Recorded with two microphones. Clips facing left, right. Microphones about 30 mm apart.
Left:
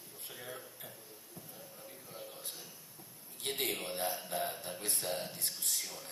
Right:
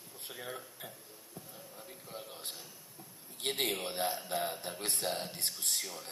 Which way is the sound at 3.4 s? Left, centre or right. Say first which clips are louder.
Right 3 dB; right.